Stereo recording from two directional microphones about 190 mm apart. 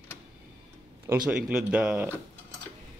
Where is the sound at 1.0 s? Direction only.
5° right (ahead or behind).